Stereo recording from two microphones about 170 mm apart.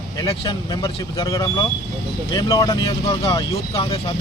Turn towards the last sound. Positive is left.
turn(degrees=35)  # may be behind; listen again after turning